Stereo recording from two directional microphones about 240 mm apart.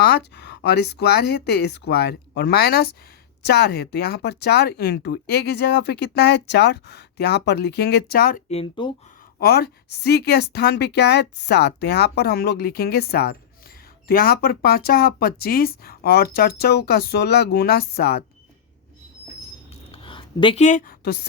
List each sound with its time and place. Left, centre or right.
0.3 s speech: left
8.4 s speech: left
9.4 s speech: left
19.9 s a sound: left